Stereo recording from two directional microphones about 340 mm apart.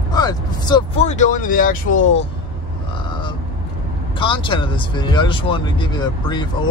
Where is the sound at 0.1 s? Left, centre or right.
Centre.